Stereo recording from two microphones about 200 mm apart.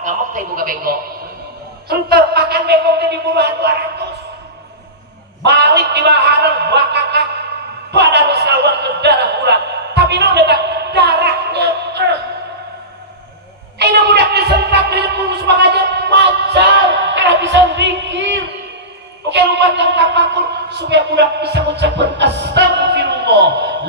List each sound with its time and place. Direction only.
0.0 s a man's voice: 40° right (ahead or behind)
1.9 s wind instrument: 50° right (ahead or behind)
5.4 s a man's voice: 60° right (ahead or behind)
7.9 s a sound: 60° right (ahead or behind)
13.7 s a sound: 55° right (ahead or behind)
19.2 s wind instrument: 60° right (ahead or behind)